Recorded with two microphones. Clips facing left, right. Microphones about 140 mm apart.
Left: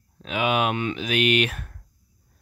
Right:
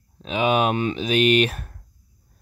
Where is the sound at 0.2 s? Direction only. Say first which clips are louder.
Right 3 dB; 25° right (ahead or behind).